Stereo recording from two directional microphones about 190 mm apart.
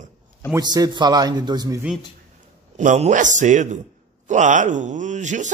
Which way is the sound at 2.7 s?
40° right (ahead or behind).